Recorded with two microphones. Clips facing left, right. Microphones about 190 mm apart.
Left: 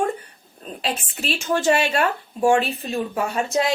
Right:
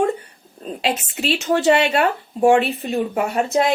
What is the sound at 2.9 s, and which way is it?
Speech, 60° right (ahead or behind).